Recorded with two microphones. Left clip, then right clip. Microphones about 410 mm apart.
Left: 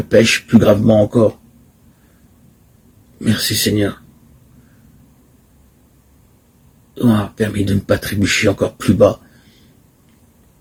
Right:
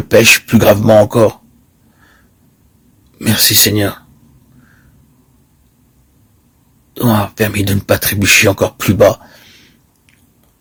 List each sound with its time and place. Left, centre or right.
0.1 s speech: right
3.2 s speech: right
6.9 s speech: right